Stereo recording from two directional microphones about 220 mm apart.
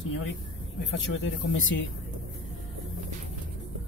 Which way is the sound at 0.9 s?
55° left (ahead or behind).